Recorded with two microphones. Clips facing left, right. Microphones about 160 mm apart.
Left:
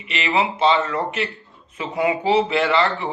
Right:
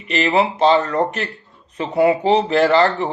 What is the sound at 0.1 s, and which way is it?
Speech, 40° right (ahead or behind).